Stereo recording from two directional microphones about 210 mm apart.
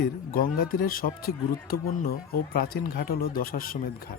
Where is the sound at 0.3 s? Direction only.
45° left (ahead or behind).